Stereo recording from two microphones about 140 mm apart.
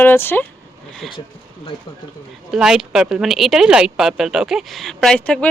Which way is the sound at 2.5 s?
5° right (ahead or behind).